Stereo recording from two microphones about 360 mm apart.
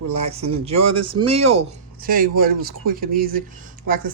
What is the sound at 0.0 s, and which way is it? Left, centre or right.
Speech, right.